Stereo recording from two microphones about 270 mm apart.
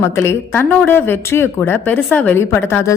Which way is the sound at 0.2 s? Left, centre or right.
Centre.